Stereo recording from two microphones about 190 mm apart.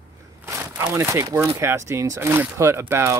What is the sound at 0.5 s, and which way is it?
Speech, 15° right (ahead or behind).